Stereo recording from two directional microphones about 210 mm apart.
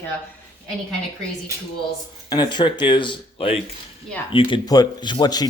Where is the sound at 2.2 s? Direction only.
20° left (ahead or behind).